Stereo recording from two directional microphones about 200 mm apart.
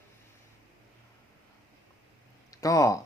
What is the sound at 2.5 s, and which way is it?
Speech, 15° left (ahead or behind).